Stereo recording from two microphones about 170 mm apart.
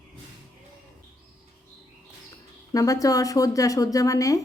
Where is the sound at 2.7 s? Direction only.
20° left (ahead or behind).